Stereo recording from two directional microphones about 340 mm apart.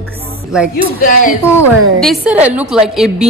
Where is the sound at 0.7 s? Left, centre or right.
Left.